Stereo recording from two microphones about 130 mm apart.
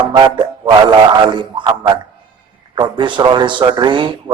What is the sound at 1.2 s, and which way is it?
Speech, 35° right (ahead or behind).